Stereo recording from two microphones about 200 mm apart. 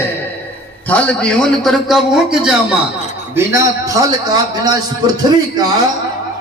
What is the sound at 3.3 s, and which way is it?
A man's voice, 15° right (ahead or behind).